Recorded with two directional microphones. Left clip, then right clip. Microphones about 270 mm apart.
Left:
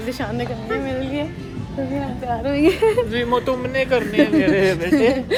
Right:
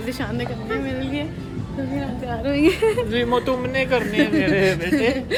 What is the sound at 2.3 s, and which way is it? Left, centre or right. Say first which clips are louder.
Speech: left 1 dB; centre.